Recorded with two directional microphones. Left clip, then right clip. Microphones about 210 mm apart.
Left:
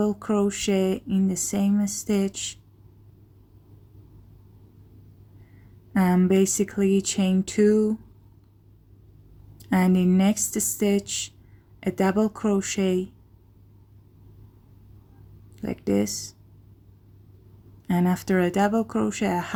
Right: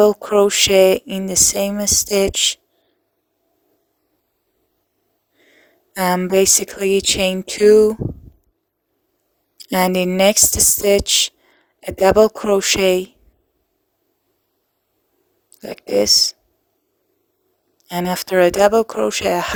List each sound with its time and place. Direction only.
0.0 s speech: 40° right (ahead or behind)
5.9 s speech: 45° right (ahead or behind)
9.6 s speech: 45° right (ahead or behind)
15.7 s speech: 40° right (ahead or behind)
17.8 s speech: 45° right (ahead or behind)